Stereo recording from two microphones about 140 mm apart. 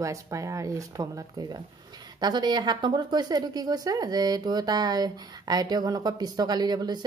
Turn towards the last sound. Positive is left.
turn(degrees=-30)  # may be behind; listen again after turning